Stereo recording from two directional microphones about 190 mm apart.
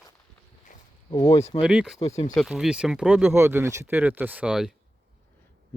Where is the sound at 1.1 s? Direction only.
20° left (ahead or behind).